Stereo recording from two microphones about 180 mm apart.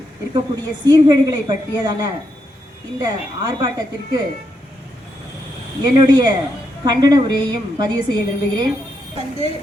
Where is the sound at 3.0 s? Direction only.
20° right (ahead or behind).